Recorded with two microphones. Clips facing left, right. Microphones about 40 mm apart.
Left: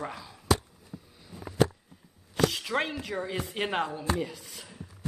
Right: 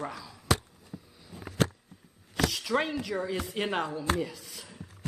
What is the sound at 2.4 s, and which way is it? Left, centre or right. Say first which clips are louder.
Speech: left 1 dB; left.